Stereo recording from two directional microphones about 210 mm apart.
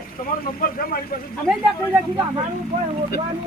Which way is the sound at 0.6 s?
45° left (ahead or behind).